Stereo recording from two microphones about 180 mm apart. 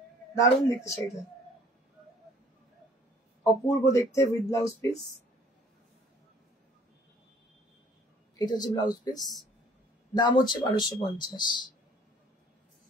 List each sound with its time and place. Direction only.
0.3 s speech: 20° left (ahead or behind)
3.6 s speech: 15° left (ahead or behind)
8.4 s speech: 20° left (ahead or behind)